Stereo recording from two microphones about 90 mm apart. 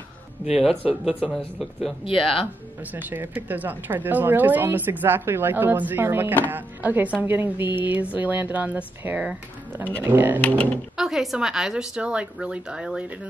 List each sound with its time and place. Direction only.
0.8 s a woman's voice: 10° right (ahead or behind)
1.6 s speech: centre (ahead or behind)
2.0 s speech: 90° left
2.8 s speech: 20° right (ahead or behind)
11.0 s a woman's voice: 5° right (ahead or behind)